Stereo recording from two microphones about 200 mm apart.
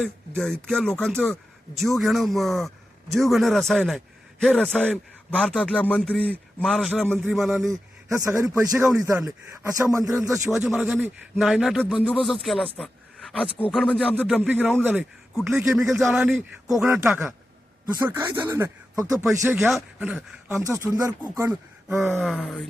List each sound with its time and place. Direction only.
0.0 s a man's voice: centre (ahead or behind)
7.7 s speech: 15° right (ahead or behind)
10.5 s a man's voice: 5° right (ahead or behind)
12.7 s a sound: centre (ahead or behind)
13.6 s a man's voice: centre (ahead or behind)
14.3 s speech: 5° right (ahead or behind)
19.5 s speech: centre (ahead or behind)
22.2 s a man's voice: 5° left (ahead or behind)